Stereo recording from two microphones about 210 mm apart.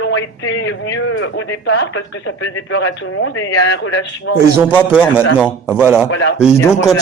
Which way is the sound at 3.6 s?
60° left (ahead or behind).